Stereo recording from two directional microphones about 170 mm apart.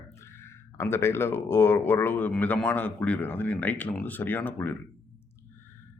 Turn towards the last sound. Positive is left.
turn(degrees=10)  # may be behind; listen again after turning